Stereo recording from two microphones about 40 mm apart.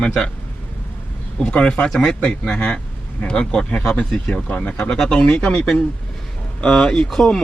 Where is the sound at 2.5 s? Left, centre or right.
Left.